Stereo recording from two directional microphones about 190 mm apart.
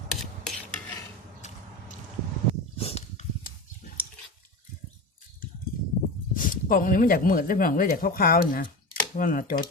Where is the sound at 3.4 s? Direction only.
50° left (ahead or behind).